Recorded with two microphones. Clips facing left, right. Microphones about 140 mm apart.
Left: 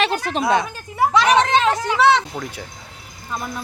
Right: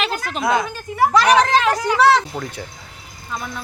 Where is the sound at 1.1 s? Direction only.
Centre (ahead or behind).